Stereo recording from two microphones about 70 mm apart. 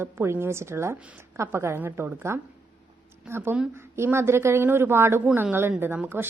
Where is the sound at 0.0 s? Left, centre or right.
Right.